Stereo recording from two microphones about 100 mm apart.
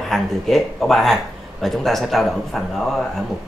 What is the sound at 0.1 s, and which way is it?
Speech, centre (ahead or behind).